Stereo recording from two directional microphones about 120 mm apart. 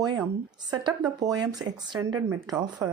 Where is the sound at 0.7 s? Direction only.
35° right (ahead or behind).